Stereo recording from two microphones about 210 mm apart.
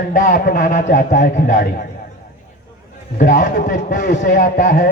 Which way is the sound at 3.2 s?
40° left (ahead or behind).